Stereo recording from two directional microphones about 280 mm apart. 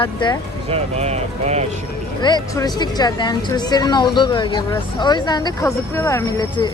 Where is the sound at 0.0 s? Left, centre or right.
Centre.